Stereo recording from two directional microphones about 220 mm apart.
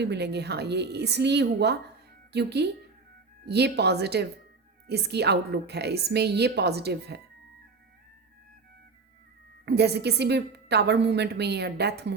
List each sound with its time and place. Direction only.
0.0 s a woman's voice: 50° right (ahead or behind)
9.6 s a woman's voice: 50° right (ahead or behind)